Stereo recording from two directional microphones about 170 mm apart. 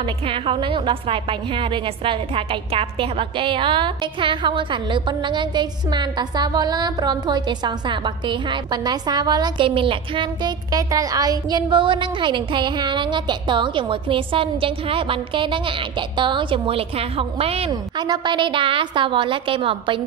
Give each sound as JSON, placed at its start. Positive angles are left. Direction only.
{"t": 0.0, "sound": "a woman's voice", "side_deg": -30}